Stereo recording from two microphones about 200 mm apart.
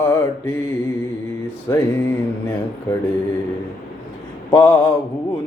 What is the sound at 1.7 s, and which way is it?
Music, 15° left (ahead or behind).